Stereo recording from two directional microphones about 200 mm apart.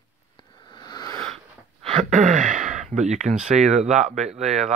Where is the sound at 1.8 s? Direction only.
30° right (ahead or behind).